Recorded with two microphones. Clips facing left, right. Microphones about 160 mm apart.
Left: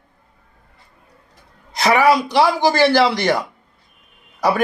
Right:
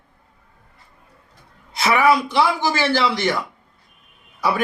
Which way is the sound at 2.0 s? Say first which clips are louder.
Left 2 dB; 35° left (ahead or behind).